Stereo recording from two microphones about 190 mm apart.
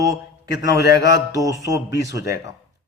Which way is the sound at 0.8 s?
55° left (ahead or behind).